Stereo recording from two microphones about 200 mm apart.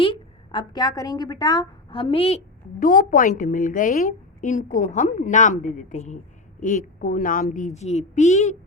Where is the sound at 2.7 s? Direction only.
45° left (ahead or behind).